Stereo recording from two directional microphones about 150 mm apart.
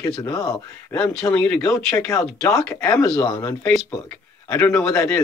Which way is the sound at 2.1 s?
20° left (ahead or behind).